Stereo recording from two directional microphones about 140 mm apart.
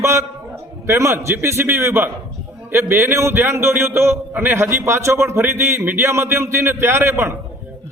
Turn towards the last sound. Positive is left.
turn(degrees=-15)  # may be behind; listen again after turning